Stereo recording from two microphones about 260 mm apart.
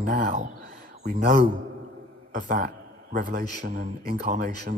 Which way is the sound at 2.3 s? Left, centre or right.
Right.